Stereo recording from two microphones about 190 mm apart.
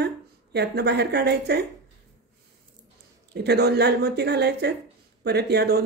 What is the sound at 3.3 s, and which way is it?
Speech, 60° right (ahead or behind).